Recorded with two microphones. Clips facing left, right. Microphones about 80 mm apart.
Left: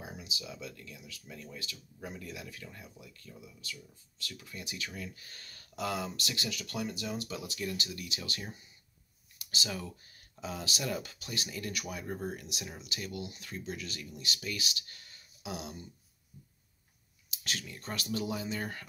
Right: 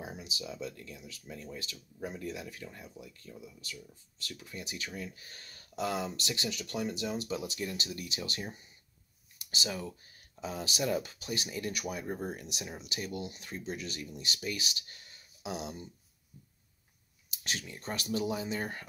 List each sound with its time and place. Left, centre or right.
0.0 s speech: right
4.4 s speech: right
13.1 s speech: right
13.5 s speech: right
17.4 s speech: centre